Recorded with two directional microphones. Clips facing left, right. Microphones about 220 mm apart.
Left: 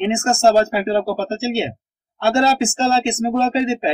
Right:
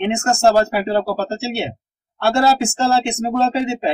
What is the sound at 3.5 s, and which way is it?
Speech, 20° left (ahead or behind).